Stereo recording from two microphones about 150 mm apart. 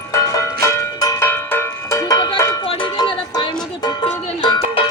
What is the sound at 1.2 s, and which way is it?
Cowbell, 15° left (ahead or behind).